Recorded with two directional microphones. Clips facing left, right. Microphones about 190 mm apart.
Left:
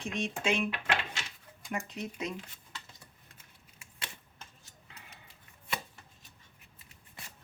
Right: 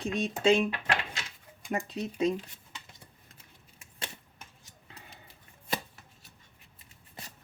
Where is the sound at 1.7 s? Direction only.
35° right (ahead or behind).